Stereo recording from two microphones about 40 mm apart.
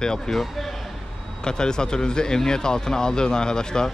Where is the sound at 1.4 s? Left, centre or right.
Centre.